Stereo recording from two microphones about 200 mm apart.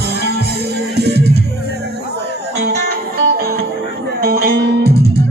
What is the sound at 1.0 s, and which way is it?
Music, 55° right (ahead or behind).